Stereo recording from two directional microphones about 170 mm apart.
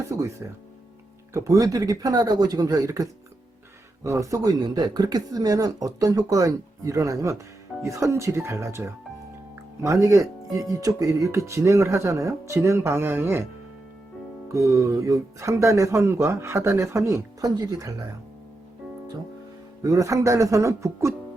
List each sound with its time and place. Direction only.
0.1 s speech: 20° right (ahead or behind)
19.8 s speech: 20° right (ahead or behind)